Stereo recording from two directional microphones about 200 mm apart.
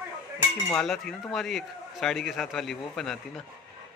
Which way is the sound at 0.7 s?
Centre (ahead or behind).